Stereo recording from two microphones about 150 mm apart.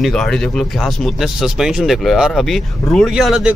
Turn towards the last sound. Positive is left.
turn(degrees=0)  # may be behind; listen again after turning